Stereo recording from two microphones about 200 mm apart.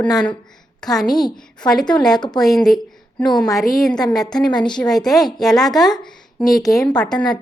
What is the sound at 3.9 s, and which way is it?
Speech, 20° left (ahead or behind).